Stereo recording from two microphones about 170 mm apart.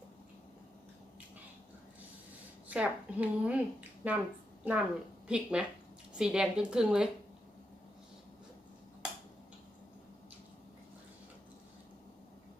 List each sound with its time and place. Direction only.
2.6 s a woman's voice: 10° right (ahead or behind)